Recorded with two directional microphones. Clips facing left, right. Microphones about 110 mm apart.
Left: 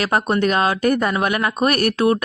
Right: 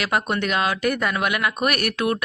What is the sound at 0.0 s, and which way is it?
A woman's voice, 40° left (ahead or behind).